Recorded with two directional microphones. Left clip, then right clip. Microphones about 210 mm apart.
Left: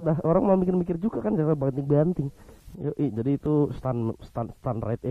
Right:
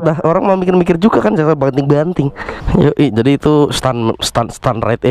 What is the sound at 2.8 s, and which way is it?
Speech, 10° right (ahead or behind).